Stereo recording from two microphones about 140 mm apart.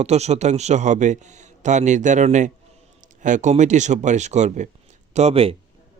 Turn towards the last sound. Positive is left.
turn(degrees=-45)  # may be behind; listen again after turning